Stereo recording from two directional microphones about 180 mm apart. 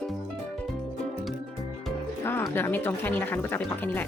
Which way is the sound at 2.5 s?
10° left (ahead or behind).